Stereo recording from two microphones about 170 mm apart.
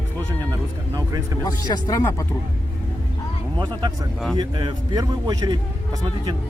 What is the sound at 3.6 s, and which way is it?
Speech, 25° right (ahead or behind).